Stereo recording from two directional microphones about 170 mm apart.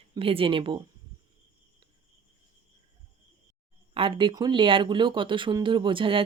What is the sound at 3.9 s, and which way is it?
Speech, 30° right (ahead or behind).